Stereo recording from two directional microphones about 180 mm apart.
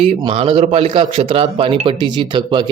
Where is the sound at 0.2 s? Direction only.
30° right (ahead or behind).